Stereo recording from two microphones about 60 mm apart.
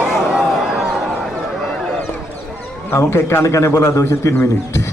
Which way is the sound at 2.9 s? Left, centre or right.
Left.